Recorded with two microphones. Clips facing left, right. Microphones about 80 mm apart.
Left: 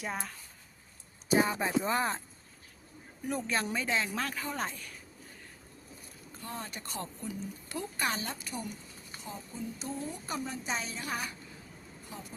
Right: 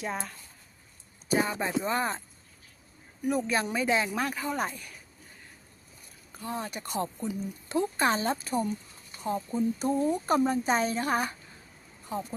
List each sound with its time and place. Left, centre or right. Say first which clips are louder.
0.0 s speech: right 3 dB; centre
3.2 s speech: right 5 dB; centre
6.3 s speech: right 6 dB; centre; by 8.7 s right
9.2 s a woman's voice: right 13 dB; right